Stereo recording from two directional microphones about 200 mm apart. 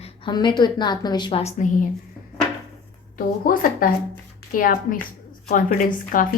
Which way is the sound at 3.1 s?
45° left (ahead or behind).